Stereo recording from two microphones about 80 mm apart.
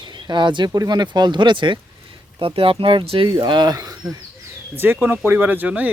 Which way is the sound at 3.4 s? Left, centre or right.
Right.